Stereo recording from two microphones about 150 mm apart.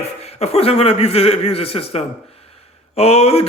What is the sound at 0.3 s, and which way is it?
A man's voice, 45° left (ahead or behind).